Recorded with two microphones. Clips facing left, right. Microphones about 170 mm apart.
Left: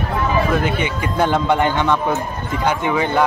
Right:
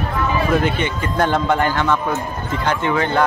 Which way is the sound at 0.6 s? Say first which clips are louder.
Even; 10° left (ahead or behind).